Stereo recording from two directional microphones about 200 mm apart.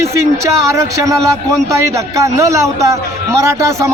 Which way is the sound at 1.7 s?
15° right (ahead or behind).